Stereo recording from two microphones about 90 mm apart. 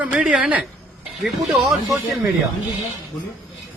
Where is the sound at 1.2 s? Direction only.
Centre (ahead or behind).